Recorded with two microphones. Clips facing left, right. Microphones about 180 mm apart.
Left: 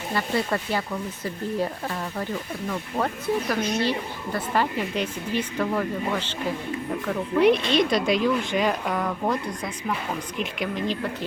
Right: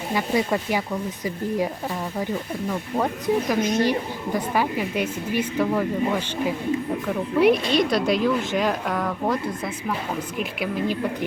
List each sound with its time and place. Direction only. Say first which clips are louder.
0.1 s speech: right 3 dB; 15° right (ahead or behind)